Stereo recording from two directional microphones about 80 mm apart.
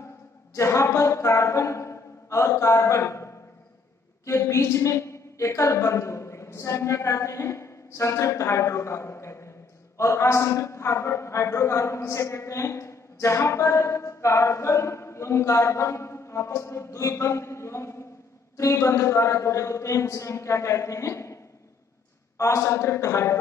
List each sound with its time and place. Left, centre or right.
0.6 s a man's voice: left
22.4 s a man's voice: left